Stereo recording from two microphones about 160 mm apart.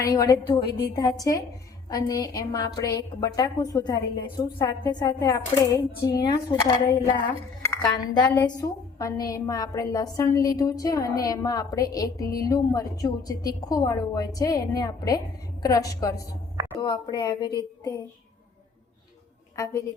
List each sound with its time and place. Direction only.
0.0 s a woman's voice: 20° left (ahead or behind)
7.9 s a woman's voice: 25° left (ahead or behind)
19.5 s a woman's voice: 20° left (ahead or behind)